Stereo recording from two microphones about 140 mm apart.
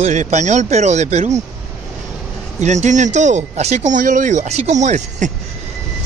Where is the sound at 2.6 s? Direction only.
55° right (ahead or behind).